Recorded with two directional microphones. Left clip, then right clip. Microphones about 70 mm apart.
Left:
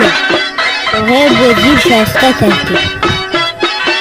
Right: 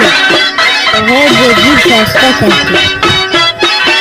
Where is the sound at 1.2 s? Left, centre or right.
Left.